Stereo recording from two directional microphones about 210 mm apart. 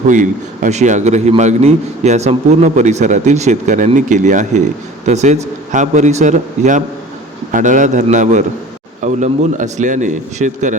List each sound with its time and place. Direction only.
0.1 s a man's voice: 35° right (ahead or behind)